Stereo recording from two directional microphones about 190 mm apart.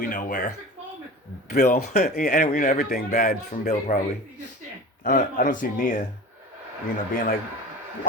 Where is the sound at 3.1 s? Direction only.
40° left (ahead or behind).